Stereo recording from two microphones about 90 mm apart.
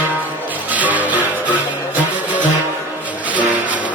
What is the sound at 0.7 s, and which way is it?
Music, 15° right (ahead or behind).